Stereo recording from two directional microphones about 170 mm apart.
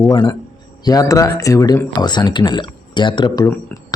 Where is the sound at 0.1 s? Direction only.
25° left (ahead or behind).